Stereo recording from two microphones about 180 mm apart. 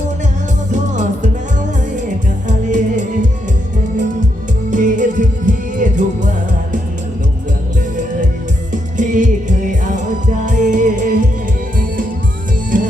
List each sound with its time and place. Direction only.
0.7 s music: 45° right (ahead or behind)
2.5 s music: 45° right (ahead or behind)
4.7 s music: 45° right (ahead or behind)
8.7 s music: 45° right (ahead or behind)
12.7 s music: 50° right (ahead or behind)